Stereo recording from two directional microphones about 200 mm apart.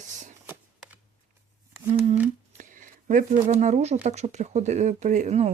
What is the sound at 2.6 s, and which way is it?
Speech, 40° right (ahead or behind).